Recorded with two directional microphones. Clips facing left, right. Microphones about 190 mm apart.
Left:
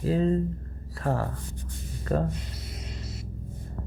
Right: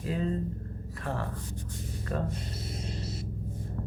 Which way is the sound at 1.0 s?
40° left (ahead or behind).